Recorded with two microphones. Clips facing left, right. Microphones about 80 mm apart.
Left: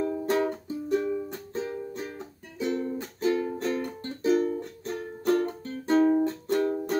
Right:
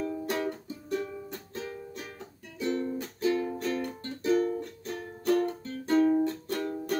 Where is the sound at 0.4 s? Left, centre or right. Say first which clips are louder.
Left 5 dB; left.